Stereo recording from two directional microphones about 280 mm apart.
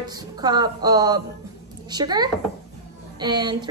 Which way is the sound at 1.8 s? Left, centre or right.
Centre.